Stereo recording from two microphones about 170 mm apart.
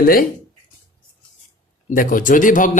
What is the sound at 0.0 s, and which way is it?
Speech, 60° left (ahead or behind).